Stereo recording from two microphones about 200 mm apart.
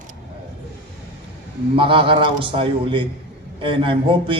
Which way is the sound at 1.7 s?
25° right (ahead or behind).